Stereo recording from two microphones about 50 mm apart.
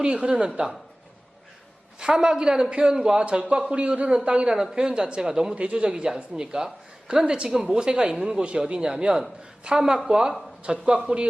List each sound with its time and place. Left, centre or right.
0.0 s a man's voice: right
2.0 s a man's voice: centre